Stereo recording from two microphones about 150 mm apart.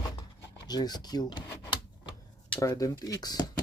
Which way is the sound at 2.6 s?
25° left (ahead or behind).